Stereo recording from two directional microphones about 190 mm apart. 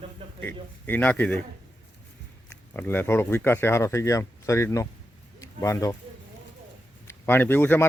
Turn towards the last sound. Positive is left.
turn(degrees=10)  # may be behind; listen again after turning